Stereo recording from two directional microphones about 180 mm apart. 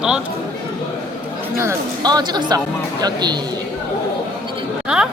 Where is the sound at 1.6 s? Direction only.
20° right (ahead or behind).